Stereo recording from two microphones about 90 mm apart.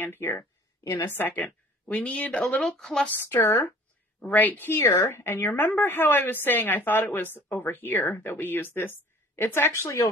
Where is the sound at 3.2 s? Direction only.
25° left (ahead or behind).